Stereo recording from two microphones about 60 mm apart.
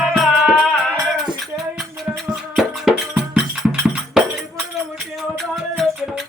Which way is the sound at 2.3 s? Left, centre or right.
Centre.